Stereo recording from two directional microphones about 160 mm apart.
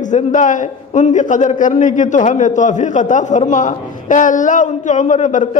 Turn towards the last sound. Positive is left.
turn(degrees=50)  # may be behind; listen again after turning